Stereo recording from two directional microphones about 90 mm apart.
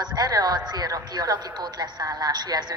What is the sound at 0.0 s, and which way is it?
A woman's voice, 50° right (ahead or behind).